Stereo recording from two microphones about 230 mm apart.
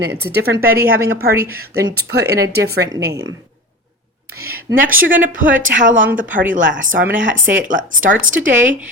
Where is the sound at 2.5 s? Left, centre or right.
Right.